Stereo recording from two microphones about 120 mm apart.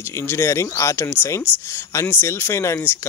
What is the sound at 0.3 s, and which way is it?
Speech, 20° left (ahead or behind).